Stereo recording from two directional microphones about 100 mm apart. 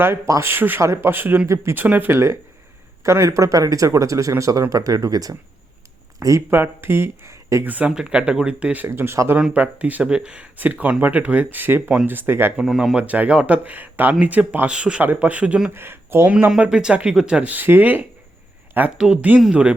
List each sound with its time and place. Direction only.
0.0 s speech: 25° right (ahead or behind)
6.5 s speech: 25° right (ahead or behind)
7.7 s speech: 10° right (ahead or behind)
9.4 s speech: 15° right (ahead or behind)
12.6 s speech: centre (ahead or behind)
13.0 s speech: 15° right (ahead or behind)
15.7 s speech: 20° right (ahead or behind)
16.5 s speech: 10° right (ahead or behind)
18.9 s speech: 5° right (ahead or behind)